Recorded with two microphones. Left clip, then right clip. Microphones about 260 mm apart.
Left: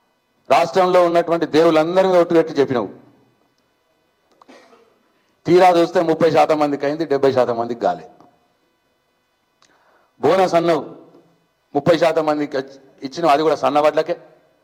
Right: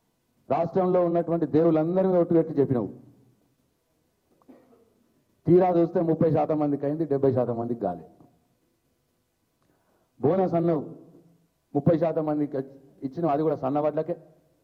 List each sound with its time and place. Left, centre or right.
0.4 s a man's voice: centre
4.4 s a sound: centre
5.4 s a man's voice: centre
10.2 s a man's voice: centre